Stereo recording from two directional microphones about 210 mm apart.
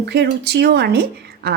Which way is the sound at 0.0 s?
50° right (ahead or behind).